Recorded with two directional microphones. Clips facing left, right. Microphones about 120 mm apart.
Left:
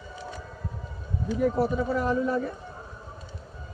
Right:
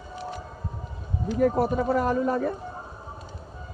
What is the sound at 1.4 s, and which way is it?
Speech, 50° right (ahead or behind).